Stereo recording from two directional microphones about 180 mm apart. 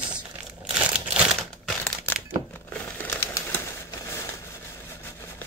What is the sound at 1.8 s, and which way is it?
Crumpling, 10° left (ahead or behind).